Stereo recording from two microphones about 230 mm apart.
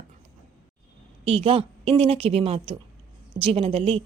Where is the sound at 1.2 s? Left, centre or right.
Right.